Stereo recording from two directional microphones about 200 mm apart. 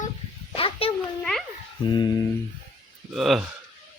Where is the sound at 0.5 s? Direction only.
30° left (ahead or behind).